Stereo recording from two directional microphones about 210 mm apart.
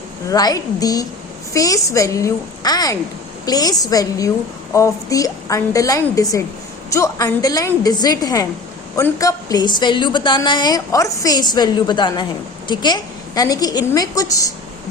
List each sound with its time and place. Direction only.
0.3 s a woman's voice: 15° left (ahead or behind)